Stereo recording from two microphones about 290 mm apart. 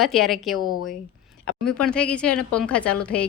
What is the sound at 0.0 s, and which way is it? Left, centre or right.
A woman's voice, centre.